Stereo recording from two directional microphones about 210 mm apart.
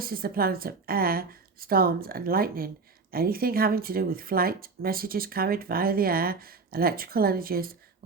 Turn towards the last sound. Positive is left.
turn(degrees=-45)  # may be behind; listen again after turning